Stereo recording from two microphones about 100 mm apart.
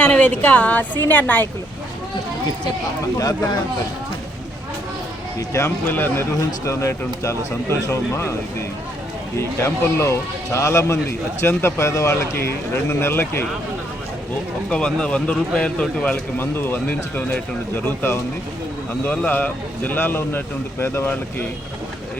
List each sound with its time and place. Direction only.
0.0 s a woman's voice: 10° left (ahead or behind)
3.2 s speech: 35° left (ahead or behind)
5.4 s speech: 30° left (ahead or behind)
9.6 s speech: 30° left (ahead or behind)
14.7 s speech: 10° left (ahead or behind)
16.4 s speech: 20° left (ahead or behind)